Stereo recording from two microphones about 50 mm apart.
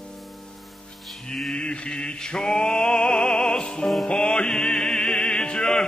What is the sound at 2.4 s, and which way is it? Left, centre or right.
Music, centre.